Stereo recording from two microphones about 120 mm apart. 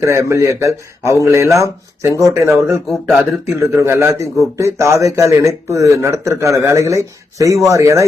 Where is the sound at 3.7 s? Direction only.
20° right (ahead or behind).